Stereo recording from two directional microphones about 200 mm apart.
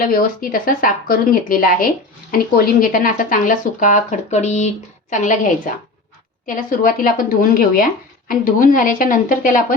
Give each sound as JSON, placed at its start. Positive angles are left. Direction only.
{"t": 0.0, "sound": "a woman's voice", "side_deg": 45}